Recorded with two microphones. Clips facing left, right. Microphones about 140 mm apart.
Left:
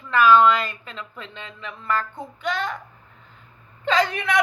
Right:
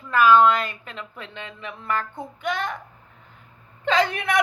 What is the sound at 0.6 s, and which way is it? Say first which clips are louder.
Speech: even; 60° right (ahead or behind).